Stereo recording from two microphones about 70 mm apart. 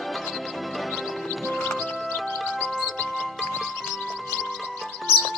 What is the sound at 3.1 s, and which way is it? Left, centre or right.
Music, centre.